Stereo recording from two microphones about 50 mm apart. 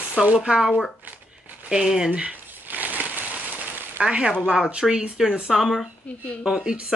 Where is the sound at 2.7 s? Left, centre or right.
Right.